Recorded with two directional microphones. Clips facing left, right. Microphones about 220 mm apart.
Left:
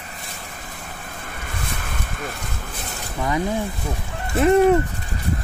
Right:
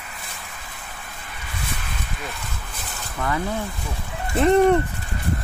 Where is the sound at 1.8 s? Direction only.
50° left (ahead or behind).